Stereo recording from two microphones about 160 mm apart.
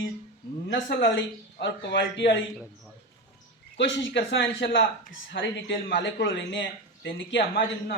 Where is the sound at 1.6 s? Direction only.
90° left.